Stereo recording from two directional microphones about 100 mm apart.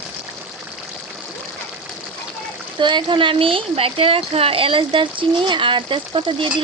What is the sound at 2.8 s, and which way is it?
Speech, 50° right (ahead or behind).